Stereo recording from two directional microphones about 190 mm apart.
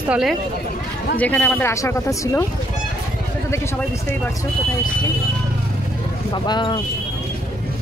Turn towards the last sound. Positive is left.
turn(degrees=25)  # may be behind; listen again after turning